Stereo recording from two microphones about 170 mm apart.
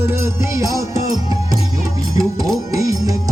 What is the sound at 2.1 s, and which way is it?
Music, 20° right (ahead or behind).